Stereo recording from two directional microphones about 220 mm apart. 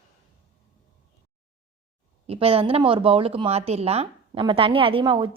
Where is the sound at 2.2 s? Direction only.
25° right (ahead or behind).